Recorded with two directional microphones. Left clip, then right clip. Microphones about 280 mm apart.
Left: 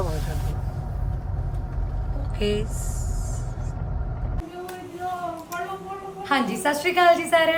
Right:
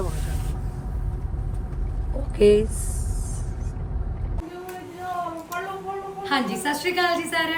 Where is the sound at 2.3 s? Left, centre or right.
Centre.